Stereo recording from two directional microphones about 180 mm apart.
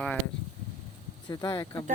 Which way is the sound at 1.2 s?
20° left (ahead or behind).